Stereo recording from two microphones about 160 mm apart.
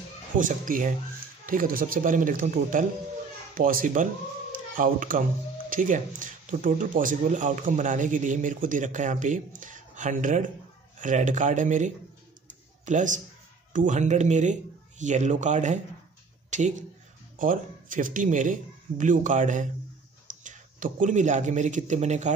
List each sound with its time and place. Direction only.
0.4 s a man's voice: 55° right (ahead or behind)
16.4 s a sound: 50° right (ahead or behind)
17.4 s a man's voice: 55° right (ahead or behind)